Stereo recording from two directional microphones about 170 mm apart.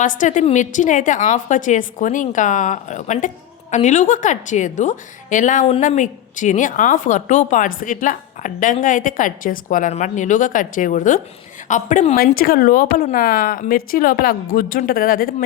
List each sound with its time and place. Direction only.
0.0 s speech: 50° left (ahead or behind)